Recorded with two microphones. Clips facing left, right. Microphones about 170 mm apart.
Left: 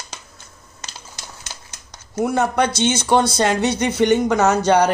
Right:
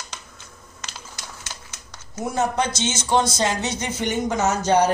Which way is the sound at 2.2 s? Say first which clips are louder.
Left 5 dB; 65° left (ahead or behind).